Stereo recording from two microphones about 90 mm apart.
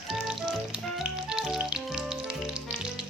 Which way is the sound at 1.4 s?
5° right (ahead or behind).